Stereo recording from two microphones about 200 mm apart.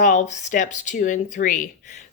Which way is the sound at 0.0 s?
40° left (ahead or behind).